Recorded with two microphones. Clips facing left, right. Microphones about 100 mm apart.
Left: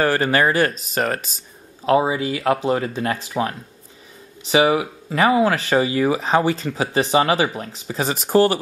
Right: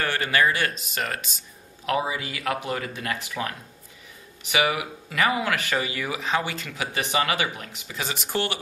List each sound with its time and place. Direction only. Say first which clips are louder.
0.0 s speech: left 6 dB; 40° left (ahead or behind)